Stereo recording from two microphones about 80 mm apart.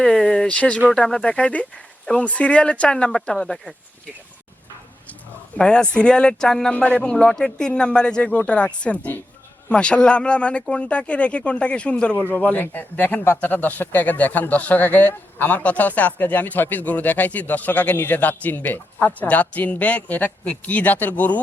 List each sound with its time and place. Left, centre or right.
0.0 s speech: centre
5.5 s speech: centre
6.7 s speech: centre